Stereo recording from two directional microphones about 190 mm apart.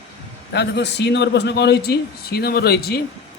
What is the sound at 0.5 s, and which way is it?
A man's voice, 65° left (ahead or behind).